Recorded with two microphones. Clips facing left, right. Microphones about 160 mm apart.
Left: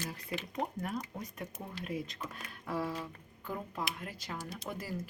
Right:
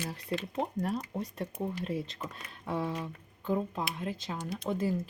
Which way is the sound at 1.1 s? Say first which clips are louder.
Right 7 dB; 30° right (ahead or behind).